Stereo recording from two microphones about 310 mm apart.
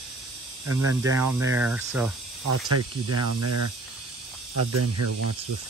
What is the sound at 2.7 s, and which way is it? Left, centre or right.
Speech, right.